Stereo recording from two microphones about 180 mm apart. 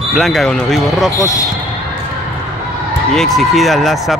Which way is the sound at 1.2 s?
20° left (ahead or behind).